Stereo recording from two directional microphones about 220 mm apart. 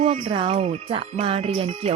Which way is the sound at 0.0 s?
25° right (ahead or behind).